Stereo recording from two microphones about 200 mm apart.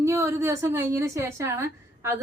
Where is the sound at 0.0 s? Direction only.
15° right (ahead or behind).